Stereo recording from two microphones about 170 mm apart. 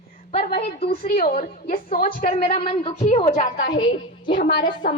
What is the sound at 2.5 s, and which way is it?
Speech, 35° left (ahead or behind).